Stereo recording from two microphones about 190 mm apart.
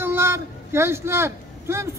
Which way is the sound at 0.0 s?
10° right (ahead or behind).